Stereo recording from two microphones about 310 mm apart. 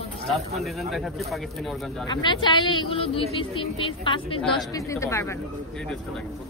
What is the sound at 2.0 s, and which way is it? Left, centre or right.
Speech, centre.